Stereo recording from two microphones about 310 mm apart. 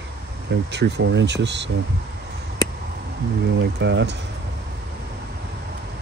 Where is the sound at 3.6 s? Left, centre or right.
Right.